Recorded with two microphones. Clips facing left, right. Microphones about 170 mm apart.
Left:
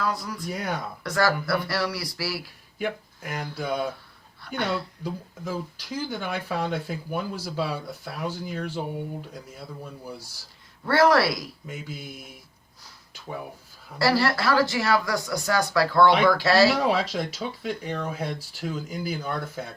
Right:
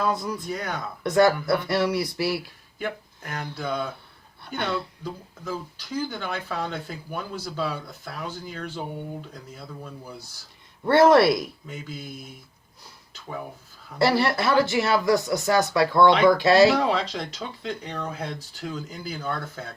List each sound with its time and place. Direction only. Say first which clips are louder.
0.0 s speech: right 3 dB; 20° right (ahead or behind)
0.5 s speech: left 4 dB; 10° left (ahead or behind)
1.0 s speech: right 5 dB; 20° right (ahead or behind)
2.7 s speech: left 2 dB; 10° left (ahead or behind)
5.0 s speech: left 1 dB; 10° left (ahead or behind)
10.8 s speech: right 4 dB; 20° right (ahead or behind)
11.6 s speech: even; 10° left (ahead or behind)
14.0 s speech: right 1 dB; 20° right (ahead or behind)
16.9 s speech: left 1 dB; 10° left (ahead or behind)